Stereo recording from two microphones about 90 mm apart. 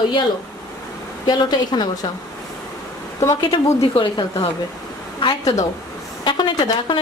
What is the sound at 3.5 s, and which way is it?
Speech, 65° left (ahead or behind).